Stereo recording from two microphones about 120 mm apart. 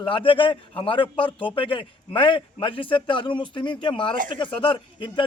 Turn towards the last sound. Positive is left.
turn(degrees=45)  # may be behind; listen again after turning